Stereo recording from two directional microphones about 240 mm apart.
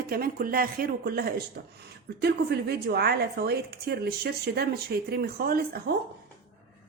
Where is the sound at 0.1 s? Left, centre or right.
Right.